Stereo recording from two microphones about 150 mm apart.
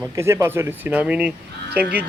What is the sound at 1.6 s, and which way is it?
Speech, 90° right.